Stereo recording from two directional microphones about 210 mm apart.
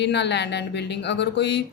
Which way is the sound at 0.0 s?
55° left (ahead or behind).